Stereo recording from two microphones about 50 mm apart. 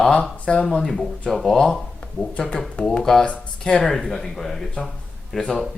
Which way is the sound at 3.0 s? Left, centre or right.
Centre.